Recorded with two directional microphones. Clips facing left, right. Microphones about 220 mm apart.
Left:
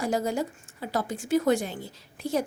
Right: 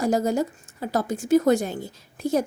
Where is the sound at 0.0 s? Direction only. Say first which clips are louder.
Right 5 dB; 40° right (ahead or behind).